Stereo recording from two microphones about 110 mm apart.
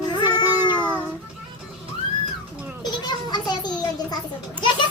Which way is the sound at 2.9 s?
40° left (ahead or behind).